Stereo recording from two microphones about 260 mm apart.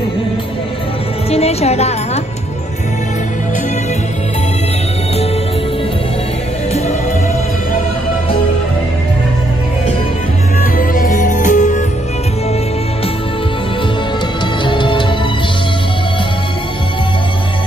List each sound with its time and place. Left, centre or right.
1.3 s a woman's voice: left
10.8 s music: left
14.6 s music: centre